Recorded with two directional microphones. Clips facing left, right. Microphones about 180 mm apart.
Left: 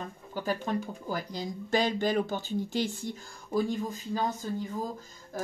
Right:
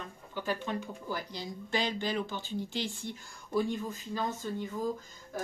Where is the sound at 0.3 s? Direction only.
40° left (ahead or behind).